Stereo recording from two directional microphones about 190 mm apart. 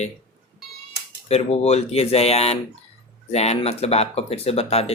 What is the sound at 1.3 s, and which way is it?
Speech, 35° left (ahead or behind).